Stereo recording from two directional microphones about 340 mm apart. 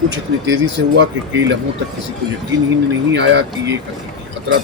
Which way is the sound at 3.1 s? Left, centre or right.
Right.